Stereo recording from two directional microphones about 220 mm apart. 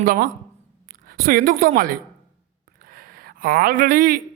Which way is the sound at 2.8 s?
40° right (ahead or behind).